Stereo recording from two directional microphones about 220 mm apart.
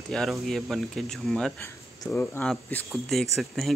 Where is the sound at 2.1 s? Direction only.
10° left (ahead or behind).